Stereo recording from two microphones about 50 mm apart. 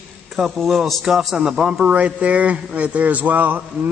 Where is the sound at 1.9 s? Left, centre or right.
Right.